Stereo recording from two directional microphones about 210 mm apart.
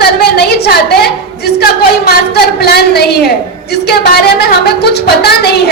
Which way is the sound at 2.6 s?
50° left (ahead or behind).